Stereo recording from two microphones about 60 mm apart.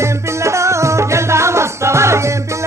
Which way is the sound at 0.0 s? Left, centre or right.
Right.